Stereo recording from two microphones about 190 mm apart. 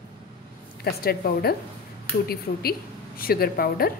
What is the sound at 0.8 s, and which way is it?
A woman's voice, 55° left (ahead or behind).